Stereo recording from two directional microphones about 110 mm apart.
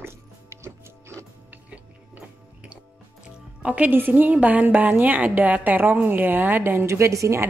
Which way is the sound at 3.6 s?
10° right (ahead or behind).